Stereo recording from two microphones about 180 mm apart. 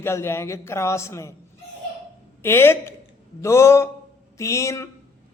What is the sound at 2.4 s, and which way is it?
A man's voice, 15° left (ahead or behind).